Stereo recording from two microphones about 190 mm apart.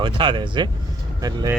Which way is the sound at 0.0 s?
25° right (ahead or behind).